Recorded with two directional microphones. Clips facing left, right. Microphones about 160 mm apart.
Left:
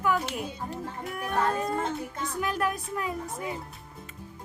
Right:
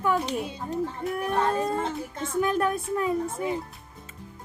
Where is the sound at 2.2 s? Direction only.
25° right (ahead or behind).